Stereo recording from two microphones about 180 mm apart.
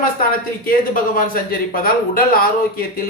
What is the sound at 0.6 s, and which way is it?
Speech, 50° left (ahead or behind).